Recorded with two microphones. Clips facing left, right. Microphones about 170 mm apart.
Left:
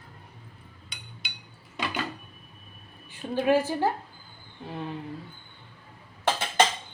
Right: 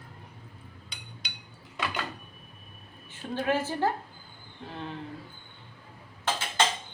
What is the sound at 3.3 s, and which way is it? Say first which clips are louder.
Speech: left 5 dB; 15° left (ahead or behind).